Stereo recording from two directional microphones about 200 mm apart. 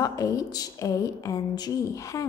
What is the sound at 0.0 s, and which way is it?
A woman's voice, 15° left (ahead or behind).